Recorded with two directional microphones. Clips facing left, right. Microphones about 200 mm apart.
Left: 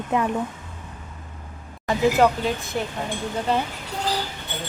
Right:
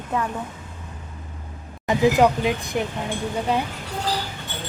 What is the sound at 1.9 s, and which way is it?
Speech, 15° right (ahead or behind).